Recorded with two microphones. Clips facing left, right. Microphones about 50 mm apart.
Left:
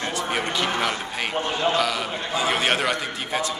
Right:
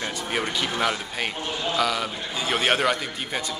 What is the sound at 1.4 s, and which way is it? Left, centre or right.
Speech, left.